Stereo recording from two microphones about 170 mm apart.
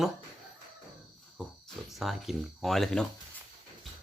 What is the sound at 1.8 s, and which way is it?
Speech, centre (ahead or behind).